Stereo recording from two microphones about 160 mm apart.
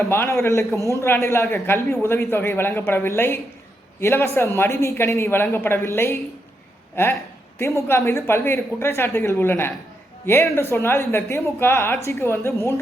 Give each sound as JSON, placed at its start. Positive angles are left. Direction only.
{"t": 0.0, "sound": "a man's voice", "side_deg": 15}